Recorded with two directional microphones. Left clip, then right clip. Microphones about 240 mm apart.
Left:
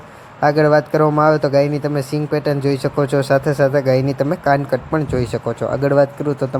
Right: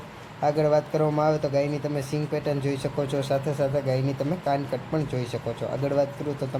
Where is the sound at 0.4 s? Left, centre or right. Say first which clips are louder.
Left 9 dB; centre.